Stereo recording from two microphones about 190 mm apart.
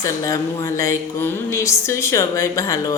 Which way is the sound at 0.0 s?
15° left (ahead or behind).